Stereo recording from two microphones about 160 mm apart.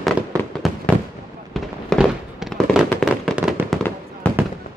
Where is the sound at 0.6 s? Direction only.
Centre (ahead or behind).